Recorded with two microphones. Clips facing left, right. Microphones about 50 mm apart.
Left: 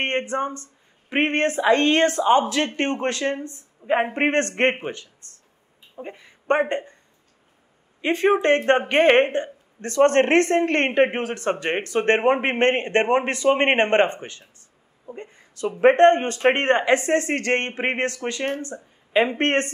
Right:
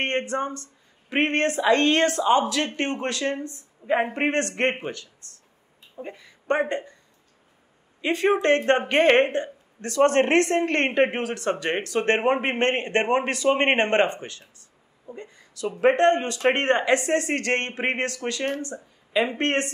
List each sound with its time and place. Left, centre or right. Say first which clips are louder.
0.0 s speech: left 2 dB; left
5.2 s a sound: even; left
6.1 s speech: left 3 dB; left
8.0 s speech: left 2 dB; left